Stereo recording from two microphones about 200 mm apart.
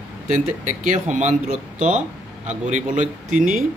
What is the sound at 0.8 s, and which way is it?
Speech, 40° right (ahead or behind).